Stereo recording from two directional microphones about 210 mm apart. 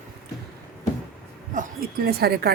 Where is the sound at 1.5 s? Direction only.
45° right (ahead or behind).